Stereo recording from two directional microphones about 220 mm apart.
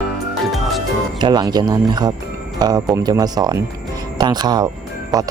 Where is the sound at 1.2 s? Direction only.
20° right (ahead or behind).